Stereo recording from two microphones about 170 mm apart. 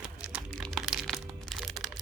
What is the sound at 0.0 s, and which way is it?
Crumpling, 5° right (ahead or behind).